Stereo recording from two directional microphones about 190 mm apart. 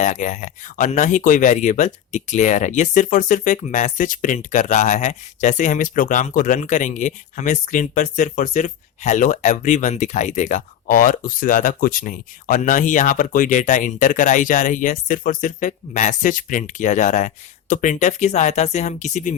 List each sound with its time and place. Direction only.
0.0 s speech: 40° left (ahead or behind)